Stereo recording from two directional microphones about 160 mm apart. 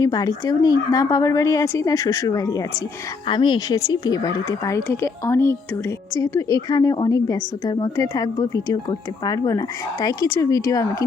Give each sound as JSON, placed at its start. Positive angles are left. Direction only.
{"t": 0.0, "sound": "a woman's voice", "side_deg": 20}